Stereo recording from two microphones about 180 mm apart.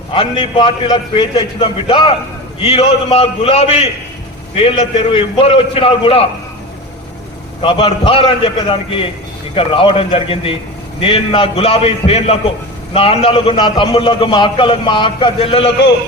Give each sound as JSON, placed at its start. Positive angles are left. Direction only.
{"t": 0.1, "sound": "a man's voice", "side_deg": 30}
{"t": 7.6, "sound": "a man's voice", "side_deg": 30}
{"t": 9.6, "sound": "a man's voice", "side_deg": 30}